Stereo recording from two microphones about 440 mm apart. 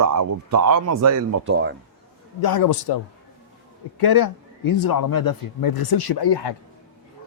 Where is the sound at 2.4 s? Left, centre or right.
Left.